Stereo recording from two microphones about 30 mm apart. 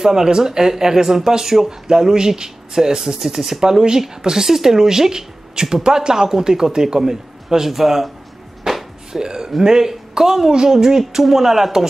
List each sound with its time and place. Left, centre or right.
0.0 s speech: centre
8.6 s music: centre
9.1 s speech: right